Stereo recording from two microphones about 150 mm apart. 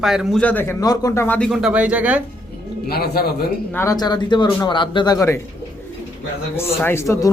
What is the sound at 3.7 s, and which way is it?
A man's voice, 25° left (ahead or behind).